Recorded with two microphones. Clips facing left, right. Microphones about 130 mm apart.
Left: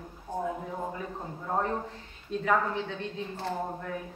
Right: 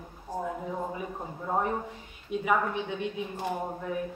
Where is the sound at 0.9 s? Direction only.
10° right (ahead or behind).